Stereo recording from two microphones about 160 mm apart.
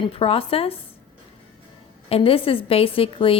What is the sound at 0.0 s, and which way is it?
Speech, 35° left (ahead or behind).